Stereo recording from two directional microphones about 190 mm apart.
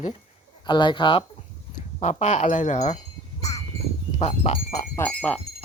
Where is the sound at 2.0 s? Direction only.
40° left (ahead or behind).